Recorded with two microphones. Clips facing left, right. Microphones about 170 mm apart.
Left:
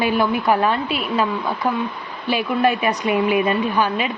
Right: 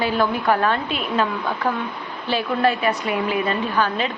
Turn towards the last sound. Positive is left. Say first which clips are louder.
# left 2 dB
turn(degrees=10)  # may be behind; listen again after turning